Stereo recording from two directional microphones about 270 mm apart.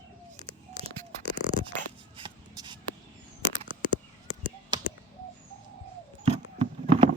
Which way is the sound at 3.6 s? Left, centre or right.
Centre.